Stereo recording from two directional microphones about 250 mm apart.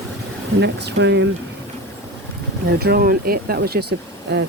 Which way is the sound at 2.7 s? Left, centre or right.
Right.